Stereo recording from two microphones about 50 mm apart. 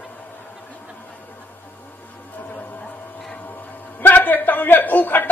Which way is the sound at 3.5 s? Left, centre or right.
Left.